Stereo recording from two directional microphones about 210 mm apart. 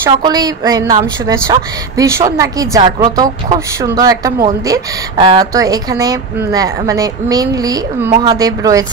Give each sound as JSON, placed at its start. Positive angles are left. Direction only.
{"t": 0.0, "sound": "a woman's voice", "side_deg": -20}